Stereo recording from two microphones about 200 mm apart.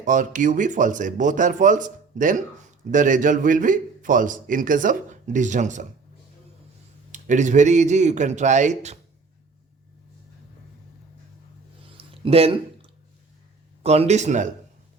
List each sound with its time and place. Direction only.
0.0 s a man's voice: 40° right (ahead or behind)
7.1 s a man's voice: 40° right (ahead or behind)
11.9 s a sound: 30° right (ahead or behind)
13.8 s a man's voice: 30° right (ahead or behind)